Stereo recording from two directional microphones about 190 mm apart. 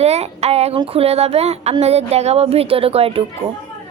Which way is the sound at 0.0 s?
35° right (ahead or behind).